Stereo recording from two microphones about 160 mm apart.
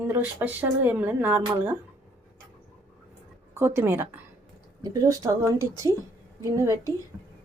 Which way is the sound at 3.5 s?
15° right (ahead or behind).